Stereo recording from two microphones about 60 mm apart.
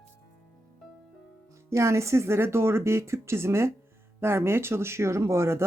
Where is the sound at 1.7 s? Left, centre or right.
Right.